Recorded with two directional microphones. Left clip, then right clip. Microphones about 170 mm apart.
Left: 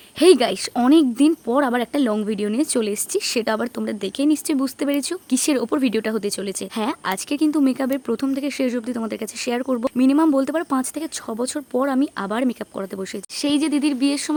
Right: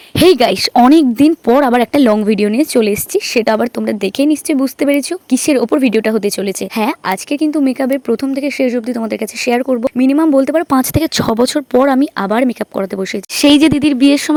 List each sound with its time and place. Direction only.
0.2 s speech: 45° right (ahead or behind); by 10.7 s 25° right (ahead or behind)
10.7 s speech: 40° right (ahead or behind)
13.3 s speech: 50° right (ahead or behind)